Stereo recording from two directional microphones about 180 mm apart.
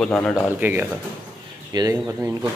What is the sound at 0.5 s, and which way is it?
Speech, 10° right (ahead or behind).